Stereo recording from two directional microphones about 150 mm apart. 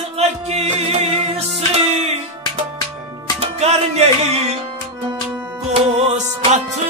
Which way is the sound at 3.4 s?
45° right (ahead or behind).